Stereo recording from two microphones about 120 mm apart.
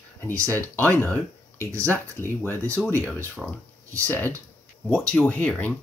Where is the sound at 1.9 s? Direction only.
20° left (ahead or behind).